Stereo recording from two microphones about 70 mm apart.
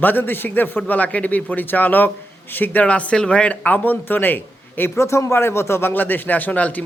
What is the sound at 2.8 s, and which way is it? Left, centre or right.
Speech, centre.